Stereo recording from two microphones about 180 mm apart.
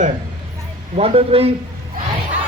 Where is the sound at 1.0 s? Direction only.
35° right (ahead or behind).